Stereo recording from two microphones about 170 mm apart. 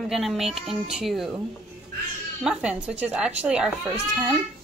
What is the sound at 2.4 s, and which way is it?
A woman's voice, 5° right (ahead or behind).